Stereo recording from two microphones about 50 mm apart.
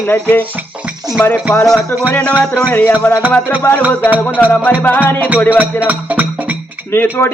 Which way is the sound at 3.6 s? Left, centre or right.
Left.